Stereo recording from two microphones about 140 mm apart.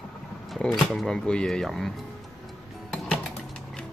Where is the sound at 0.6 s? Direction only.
5° left (ahead or behind).